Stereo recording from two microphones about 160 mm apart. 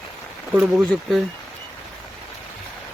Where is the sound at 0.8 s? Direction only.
Centre (ahead or behind).